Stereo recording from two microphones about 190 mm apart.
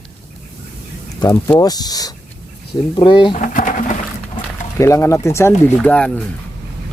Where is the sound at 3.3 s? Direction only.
45° left (ahead or behind).